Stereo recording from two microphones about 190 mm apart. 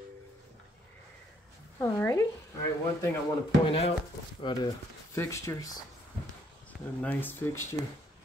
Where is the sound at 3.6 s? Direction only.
30° left (ahead or behind).